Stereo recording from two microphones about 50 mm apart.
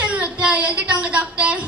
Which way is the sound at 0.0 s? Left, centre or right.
Right.